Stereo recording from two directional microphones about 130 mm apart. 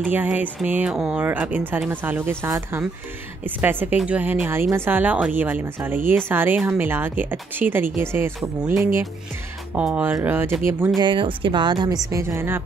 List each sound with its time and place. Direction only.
0.0 s a woman's voice: 15° right (ahead or behind)
11.0 s speech: 40° right (ahead or behind); by 12.6 s 20° right (ahead or behind)